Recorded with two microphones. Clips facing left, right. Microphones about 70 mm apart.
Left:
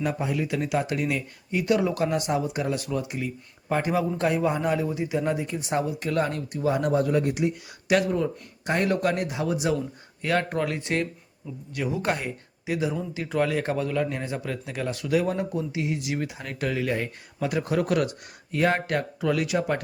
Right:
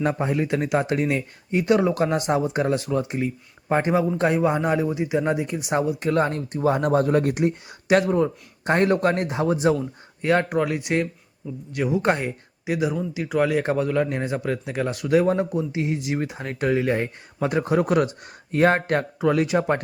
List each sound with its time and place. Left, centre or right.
0.0 s speech: right
7.9 s speech: right
10.2 s speech: right
10.5 s speech: centre
18.5 s speech: right